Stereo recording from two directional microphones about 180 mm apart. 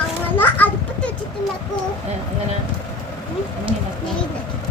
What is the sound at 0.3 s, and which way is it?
Children playing, 10° left (ahead or behind).